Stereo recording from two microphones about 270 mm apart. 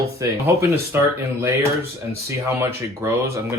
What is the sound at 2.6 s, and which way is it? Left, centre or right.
Speech, centre.